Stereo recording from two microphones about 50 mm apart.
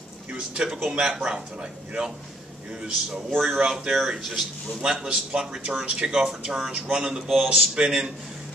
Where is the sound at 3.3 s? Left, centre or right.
Centre.